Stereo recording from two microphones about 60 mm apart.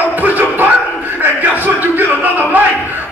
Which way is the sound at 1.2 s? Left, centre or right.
Right.